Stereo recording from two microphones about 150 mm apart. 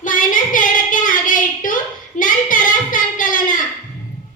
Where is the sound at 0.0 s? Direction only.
60° left (ahead or behind).